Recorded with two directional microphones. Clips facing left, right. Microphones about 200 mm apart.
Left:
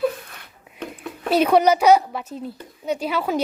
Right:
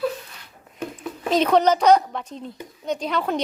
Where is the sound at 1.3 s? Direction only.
10° left (ahead or behind).